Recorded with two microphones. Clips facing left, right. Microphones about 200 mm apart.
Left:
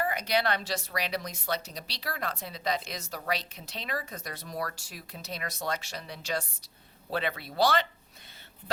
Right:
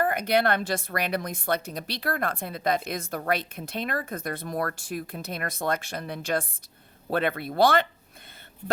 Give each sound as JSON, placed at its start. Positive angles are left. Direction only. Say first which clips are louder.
{"t": 0.0, "sound": "a woman's voice", "louder": "right 5 dB", "side_deg": -55}